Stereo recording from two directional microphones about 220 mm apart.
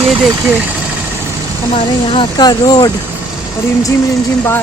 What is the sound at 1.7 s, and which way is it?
Speech, 25° left (ahead or behind).